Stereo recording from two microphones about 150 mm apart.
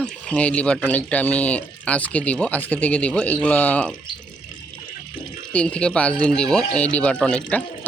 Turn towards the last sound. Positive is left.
turn(degrees=5)  # may be behind; listen again after turning